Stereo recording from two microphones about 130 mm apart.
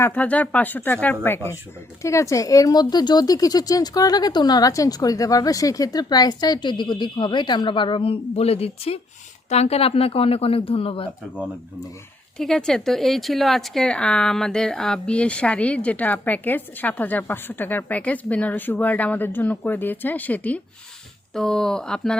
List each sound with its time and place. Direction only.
0.0 s a woman's voice: 15° left (ahead or behind)
2.0 s a woman's voice: 20° left (ahead or behind); by 11.1 s 45° left (ahead or behind)
12.4 s a woman's voice: 5° left (ahead or behind)